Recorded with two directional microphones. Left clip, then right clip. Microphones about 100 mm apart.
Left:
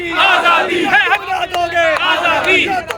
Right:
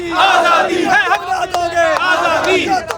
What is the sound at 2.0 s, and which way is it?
Speech, 50° right (ahead or behind).